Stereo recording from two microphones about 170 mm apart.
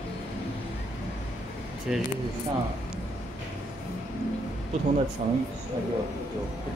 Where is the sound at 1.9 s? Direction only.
5° right (ahead or behind).